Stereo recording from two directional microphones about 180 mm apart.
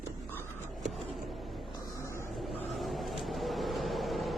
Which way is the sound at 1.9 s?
15° left (ahead or behind).